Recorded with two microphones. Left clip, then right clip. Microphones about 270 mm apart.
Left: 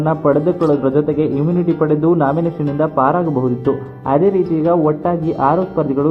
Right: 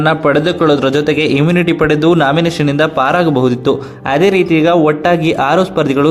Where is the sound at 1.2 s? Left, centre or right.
Right.